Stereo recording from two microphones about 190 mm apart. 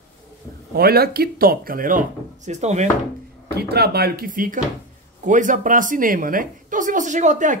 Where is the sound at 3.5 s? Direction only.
55° right (ahead or behind).